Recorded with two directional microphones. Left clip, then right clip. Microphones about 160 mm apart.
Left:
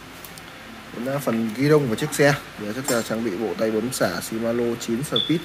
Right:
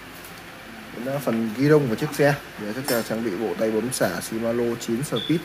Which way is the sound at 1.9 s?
15° left (ahead or behind).